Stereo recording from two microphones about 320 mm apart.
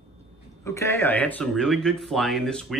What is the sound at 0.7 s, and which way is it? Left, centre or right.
Speech, centre.